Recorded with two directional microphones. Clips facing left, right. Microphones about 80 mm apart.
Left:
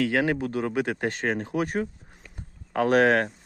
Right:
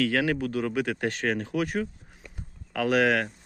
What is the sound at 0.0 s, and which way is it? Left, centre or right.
Speech, left.